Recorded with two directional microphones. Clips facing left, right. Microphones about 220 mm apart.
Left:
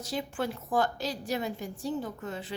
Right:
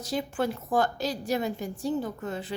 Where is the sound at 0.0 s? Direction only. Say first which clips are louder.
Right 4 dB; 45° right (ahead or behind).